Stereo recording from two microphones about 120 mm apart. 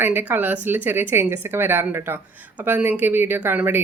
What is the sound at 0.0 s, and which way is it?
A woman's voice, 15° right (ahead or behind).